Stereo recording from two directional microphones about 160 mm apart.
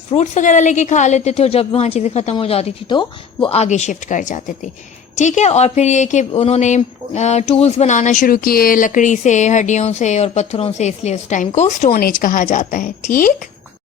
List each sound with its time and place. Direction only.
0.1 s a woman's voice: 45° left (ahead or behind)
11.9 s a woman's voice: 60° left (ahead or behind)